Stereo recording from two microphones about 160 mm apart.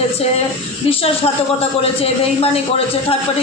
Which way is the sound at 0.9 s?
40° left (ahead or behind).